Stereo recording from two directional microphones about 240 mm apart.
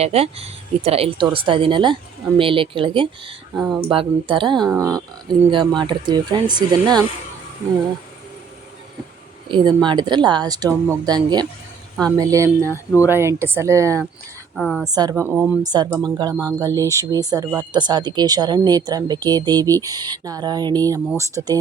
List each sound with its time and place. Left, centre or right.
0.0 s speech: right
9.5 s speech: centre
12.6 s speech: centre
13.1 s speech: centre
14.5 s a woman's voice: centre
14.8 s speech: centre